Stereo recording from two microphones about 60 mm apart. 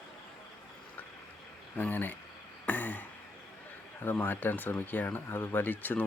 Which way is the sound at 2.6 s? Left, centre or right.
Left.